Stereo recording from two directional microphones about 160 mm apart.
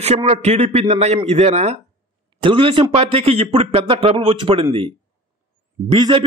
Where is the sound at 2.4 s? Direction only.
35° right (ahead or behind).